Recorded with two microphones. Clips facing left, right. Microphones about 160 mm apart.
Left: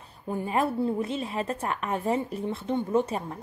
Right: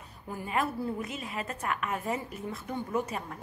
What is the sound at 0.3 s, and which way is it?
A woman's voice, 30° left (ahead or behind).